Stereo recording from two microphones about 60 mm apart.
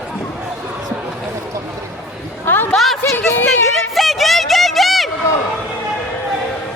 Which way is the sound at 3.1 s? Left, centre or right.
Left.